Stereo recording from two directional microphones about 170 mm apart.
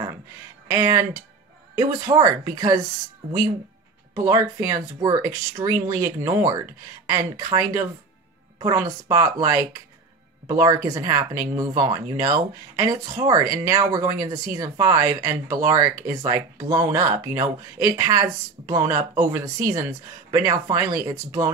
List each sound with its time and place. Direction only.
0.7 s speech: 20° right (ahead or behind)
4.1 s speech: 20° right (ahead or behind)
18.9 s speech: 45° right (ahead or behind)
19.7 s speech: 20° right (ahead or behind)